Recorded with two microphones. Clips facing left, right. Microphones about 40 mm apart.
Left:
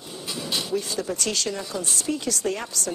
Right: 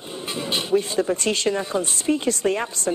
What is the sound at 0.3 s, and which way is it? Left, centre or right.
A woman's voice, right.